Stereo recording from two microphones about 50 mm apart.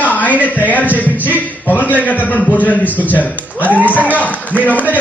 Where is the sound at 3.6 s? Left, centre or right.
Right.